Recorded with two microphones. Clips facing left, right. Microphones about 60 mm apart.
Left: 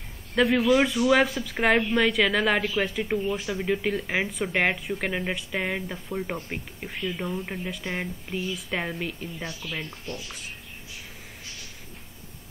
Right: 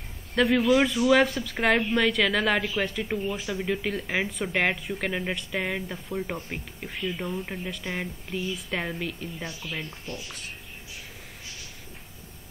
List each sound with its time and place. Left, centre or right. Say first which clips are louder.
0.3 s speech: even; centre